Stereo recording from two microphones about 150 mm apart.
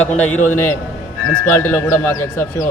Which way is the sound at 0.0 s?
10° left (ahead or behind).